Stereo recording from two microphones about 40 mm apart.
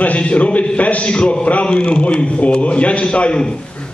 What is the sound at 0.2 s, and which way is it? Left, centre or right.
Speech, left.